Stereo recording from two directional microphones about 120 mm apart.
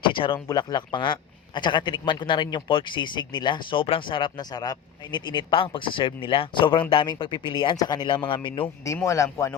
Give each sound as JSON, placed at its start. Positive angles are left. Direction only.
{"t": 0.0, "sound": "a sound", "side_deg": 45}
{"t": 0.3, "sound": "speech", "side_deg": 35}
{"t": 9.0, "sound": "a man's voice", "side_deg": 25}